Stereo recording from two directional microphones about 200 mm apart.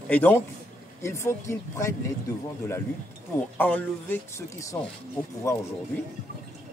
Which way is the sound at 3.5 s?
10° left (ahead or behind).